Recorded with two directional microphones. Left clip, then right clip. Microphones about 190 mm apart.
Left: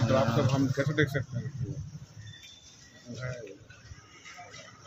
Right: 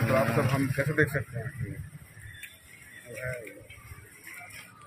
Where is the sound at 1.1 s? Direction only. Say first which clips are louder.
Right 2 dB; 25° left (ahead or behind).